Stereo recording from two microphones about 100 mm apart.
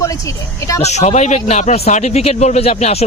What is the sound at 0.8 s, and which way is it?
Speech, 90° left.